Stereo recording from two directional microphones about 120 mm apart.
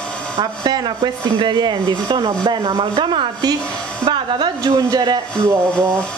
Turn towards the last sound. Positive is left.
turn(degrees=-20)  # may be behind; listen again after turning